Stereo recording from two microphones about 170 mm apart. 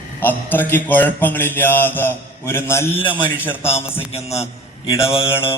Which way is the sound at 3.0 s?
30° left (ahead or behind).